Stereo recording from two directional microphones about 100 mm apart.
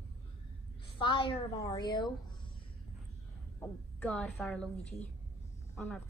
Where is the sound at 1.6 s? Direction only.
40° left (ahead or behind).